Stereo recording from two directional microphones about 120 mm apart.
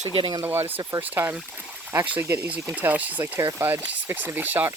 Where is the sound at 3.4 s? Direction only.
25° right (ahead or behind).